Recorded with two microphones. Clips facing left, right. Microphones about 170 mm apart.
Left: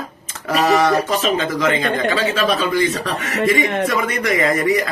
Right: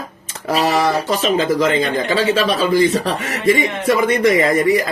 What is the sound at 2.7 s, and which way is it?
Speech, 30° right (ahead or behind).